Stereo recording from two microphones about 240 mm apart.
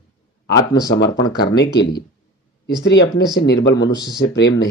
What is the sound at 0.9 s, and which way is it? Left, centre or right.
Speech, left.